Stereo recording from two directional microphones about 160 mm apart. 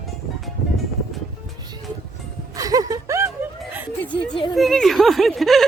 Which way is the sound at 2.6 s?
20° right (ahead or behind).